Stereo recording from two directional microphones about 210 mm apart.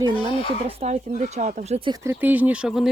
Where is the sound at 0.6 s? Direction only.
30° right (ahead or behind); by 2.9 s 5° right (ahead or behind).